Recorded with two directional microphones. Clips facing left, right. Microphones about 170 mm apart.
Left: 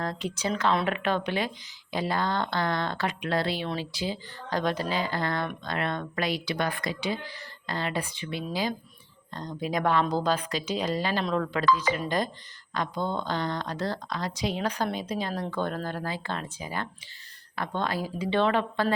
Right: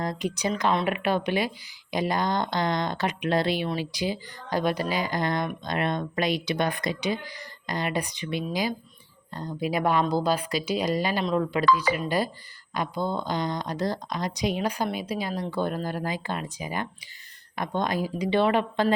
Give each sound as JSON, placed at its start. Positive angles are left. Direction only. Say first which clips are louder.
{"t": 0.0, "sound": "speech", "louder": "right 3 dB", "side_deg": -15}